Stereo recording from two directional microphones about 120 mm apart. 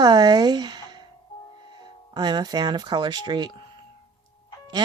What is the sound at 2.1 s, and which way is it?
Speech, 35° right (ahead or behind).